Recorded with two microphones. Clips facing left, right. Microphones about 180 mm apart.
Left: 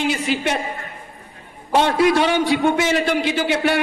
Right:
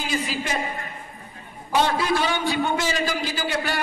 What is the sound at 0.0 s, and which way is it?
Speech, 70° left (ahead or behind).